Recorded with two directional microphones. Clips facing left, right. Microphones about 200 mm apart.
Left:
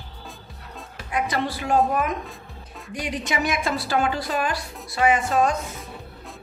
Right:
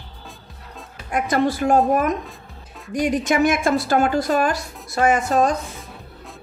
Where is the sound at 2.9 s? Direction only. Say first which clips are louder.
Right 8 dB; 45° right (ahead or behind).